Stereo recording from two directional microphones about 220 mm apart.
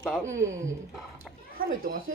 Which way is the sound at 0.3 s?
60° right (ahead or behind).